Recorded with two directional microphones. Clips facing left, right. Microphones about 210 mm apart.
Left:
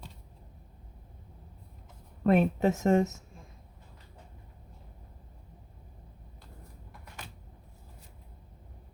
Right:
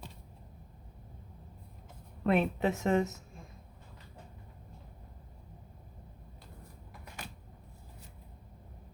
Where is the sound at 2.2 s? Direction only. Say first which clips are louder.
Left 4 dB; 45° left (ahead or behind).